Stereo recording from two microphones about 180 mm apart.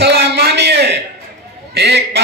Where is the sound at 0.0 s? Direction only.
65° right (ahead or behind).